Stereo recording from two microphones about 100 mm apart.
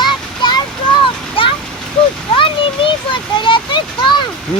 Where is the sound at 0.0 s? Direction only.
50° left (ahead or behind).